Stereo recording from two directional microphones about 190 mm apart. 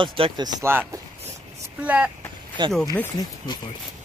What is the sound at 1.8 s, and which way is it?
Speech, 10° right (ahead or behind).